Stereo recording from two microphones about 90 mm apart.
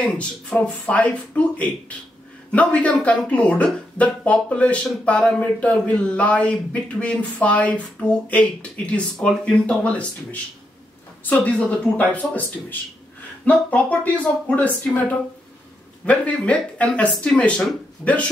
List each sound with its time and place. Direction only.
0.0 s a woman's voice: 10° left (ahead or behind)